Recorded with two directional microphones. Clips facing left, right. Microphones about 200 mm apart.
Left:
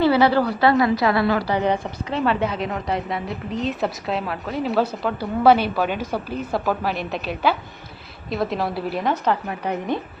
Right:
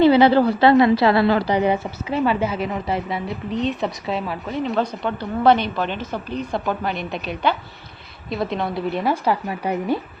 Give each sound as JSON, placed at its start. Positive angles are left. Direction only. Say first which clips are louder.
{"t": 0.0, "sound": "a woman's voice", "louder": "right 4 dB", "side_deg": -20}
{"t": 1.5, "sound": "a woman's voice", "louder": "right 2 dB", "side_deg": -10}
{"t": 9.0, "sound": "a woman's voice", "louder": "even", "side_deg": -10}